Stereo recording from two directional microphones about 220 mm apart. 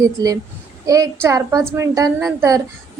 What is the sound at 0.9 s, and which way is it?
A woman's voice, 15° right (ahead or behind).